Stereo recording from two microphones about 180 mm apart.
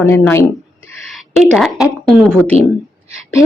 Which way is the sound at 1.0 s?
Centre (ahead or behind).